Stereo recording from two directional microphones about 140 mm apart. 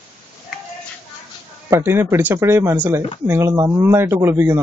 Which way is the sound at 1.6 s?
20° right (ahead or behind).